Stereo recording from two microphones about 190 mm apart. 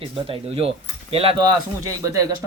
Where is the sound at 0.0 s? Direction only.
30° right (ahead or behind).